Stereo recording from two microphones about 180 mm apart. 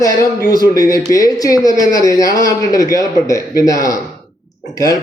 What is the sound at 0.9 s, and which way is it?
A man's voice, 20° left (ahead or behind).